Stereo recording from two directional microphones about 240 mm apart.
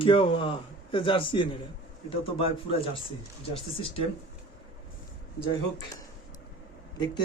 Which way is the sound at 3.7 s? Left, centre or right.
Left.